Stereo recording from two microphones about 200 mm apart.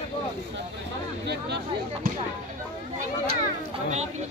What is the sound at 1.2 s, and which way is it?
Speech, 55° right (ahead or behind).